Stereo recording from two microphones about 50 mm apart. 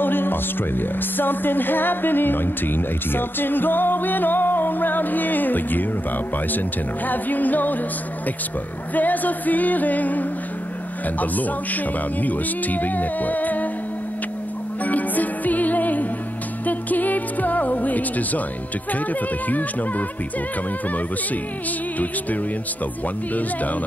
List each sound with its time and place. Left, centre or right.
0.0 s music: left
7.1 s music: left
8.9 s music: left
14.8 s music: left
23.3 s music: left